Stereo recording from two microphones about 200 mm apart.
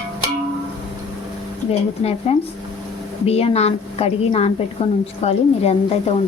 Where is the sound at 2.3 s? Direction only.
30° left (ahead or behind).